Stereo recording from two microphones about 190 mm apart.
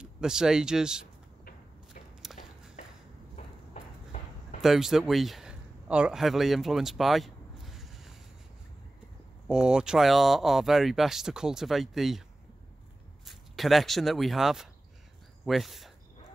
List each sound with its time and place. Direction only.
0.0 s speech: 5° right (ahead or behind)
2.3 s a sound: centre (ahead or behind)
3.3 s clip-clop: 40° left (ahead or behind)
4.6 s speech: centre (ahead or behind)
9.5 s speech: 5° right (ahead or behind)
13.2 s speech: centre (ahead or behind)